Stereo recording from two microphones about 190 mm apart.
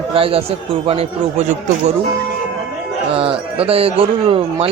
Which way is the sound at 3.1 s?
30° right (ahead or behind).